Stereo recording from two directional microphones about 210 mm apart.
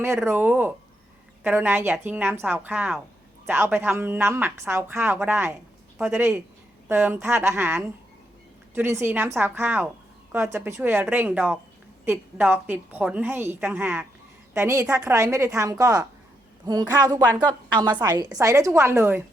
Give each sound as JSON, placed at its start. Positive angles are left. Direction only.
{"t": 0.3, "sound": "a woman's voice", "side_deg": -10}